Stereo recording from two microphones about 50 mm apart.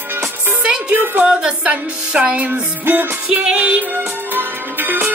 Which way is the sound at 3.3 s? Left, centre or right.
Centre.